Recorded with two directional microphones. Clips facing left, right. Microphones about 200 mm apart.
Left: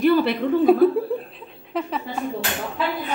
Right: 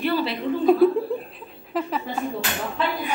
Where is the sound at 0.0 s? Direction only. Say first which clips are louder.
Left 6 dB; 55° left (ahead or behind).